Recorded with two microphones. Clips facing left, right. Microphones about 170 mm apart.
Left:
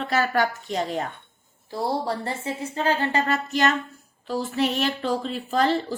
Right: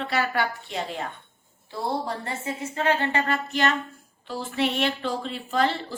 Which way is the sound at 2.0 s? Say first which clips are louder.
Left 3 dB; 30° left (ahead or behind).